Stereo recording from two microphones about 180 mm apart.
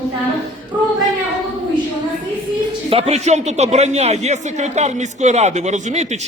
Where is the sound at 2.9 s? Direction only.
40° right (ahead or behind).